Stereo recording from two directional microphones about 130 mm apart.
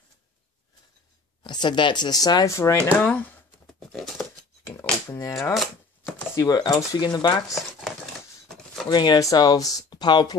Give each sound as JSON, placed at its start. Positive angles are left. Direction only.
{"t": 1.4, "sound": "speech", "side_deg": 35}
{"t": 3.1, "sound": "speech", "side_deg": 15}
{"t": 3.9, "sound": "a sound", "side_deg": 5}
{"t": 5.5, "sound": "chopping", "side_deg": 0}
{"t": 6.3, "sound": "speech", "side_deg": 30}
{"t": 8.8, "sound": "speech", "side_deg": 35}